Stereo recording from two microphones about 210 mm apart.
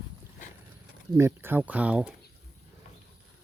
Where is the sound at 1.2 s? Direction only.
10° right (ahead or behind).